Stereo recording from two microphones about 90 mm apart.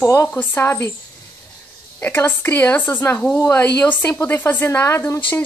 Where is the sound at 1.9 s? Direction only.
20° left (ahead or behind).